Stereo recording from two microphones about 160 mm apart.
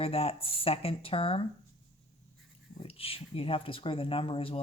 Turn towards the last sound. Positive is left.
turn(degrees=35)  # may be behind; listen again after turning